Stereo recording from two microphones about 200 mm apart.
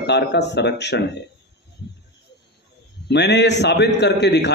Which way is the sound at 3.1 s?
60° left (ahead or behind).